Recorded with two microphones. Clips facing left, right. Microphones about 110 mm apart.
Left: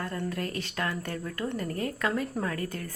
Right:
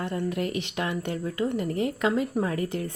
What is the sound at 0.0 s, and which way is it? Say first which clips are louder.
Speech: right 4 dB; 20° right (ahead or behind).